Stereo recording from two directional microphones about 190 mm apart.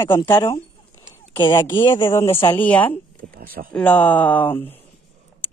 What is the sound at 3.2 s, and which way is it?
Speech, 50° right (ahead or behind).